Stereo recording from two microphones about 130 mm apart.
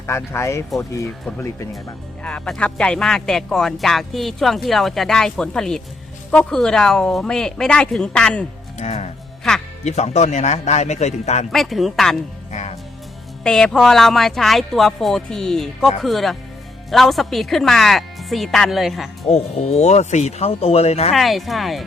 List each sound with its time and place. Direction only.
0.3 s speech: 20° left (ahead or behind)
2.2 s speech: 10° left (ahead or behind)
8.8 s speech: 60° left (ahead or behind)
11.5 s speech: centre (ahead or behind)
12.5 s music: 60° left (ahead or behind)
13.4 s speech: 5° left (ahead or behind)
19.3 s speech: 55° left (ahead or behind)
21.1 s speech: centre (ahead or behind)